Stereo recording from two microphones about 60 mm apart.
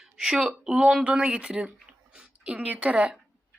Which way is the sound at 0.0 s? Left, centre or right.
Centre.